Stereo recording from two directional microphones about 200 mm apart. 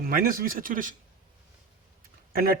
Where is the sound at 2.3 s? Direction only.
45° right (ahead or behind).